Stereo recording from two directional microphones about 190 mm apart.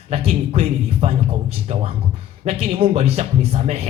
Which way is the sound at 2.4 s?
30° right (ahead or behind).